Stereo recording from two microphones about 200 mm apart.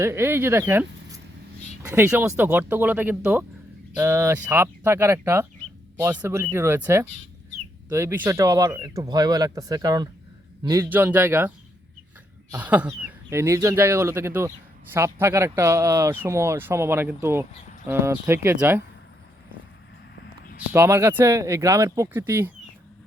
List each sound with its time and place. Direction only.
0.0 s speech: 10° right (ahead or behind)
20.7 s speech: 15° right (ahead or behind)